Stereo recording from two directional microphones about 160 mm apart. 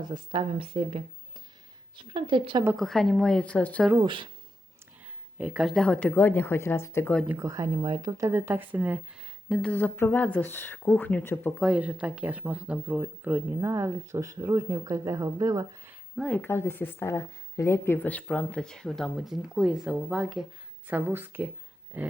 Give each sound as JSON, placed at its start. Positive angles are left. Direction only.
{"t": 0.0, "sound": "speech", "side_deg": -30}
{"t": 2.7, "sound": "speech", "side_deg": 0}
{"t": 4.0, "sound": "speech", "side_deg": -30}
{"t": 5.4, "sound": "speech", "side_deg": -5}
{"t": 7.3, "sound": "a woman's voice", "side_deg": -20}
{"t": 8.3, "sound": "speech", "side_deg": -15}
{"t": 9.5, "sound": "speech", "side_deg": 5}
{"t": 11.5, "sound": "speech", "side_deg": -5}
{"t": 16.1, "sound": "speech", "side_deg": 0}
{"t": 16.4, "sound": "speech", "side_deg": 15}